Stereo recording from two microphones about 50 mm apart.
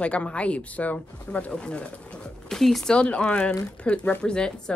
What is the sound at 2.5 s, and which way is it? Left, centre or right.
Speech, centre.